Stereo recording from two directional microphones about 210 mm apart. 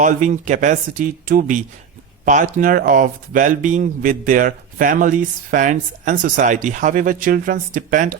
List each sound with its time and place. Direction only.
0.0 s speech: 35° right (ahead or behind)